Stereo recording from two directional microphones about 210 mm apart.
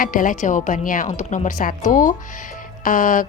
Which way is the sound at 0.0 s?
40° left (ahead or behind).